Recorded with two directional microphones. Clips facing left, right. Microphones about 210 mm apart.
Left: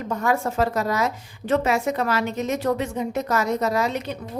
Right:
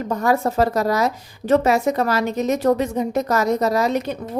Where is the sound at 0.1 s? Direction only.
40° right (ahead or behind).